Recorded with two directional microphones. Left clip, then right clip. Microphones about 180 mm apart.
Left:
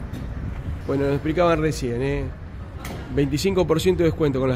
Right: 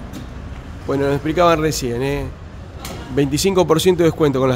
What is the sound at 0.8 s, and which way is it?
A man's voice, 10° right (ahead or behind).